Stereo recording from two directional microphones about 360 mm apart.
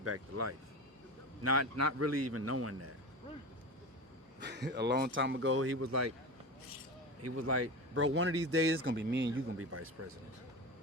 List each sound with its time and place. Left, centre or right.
0.0 s a man's voice: right
4.4 s speech: right
7.2 s a man's voice: right